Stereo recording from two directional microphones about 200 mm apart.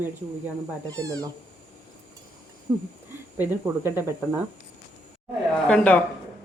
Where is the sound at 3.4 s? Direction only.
10° right (ahead or behind).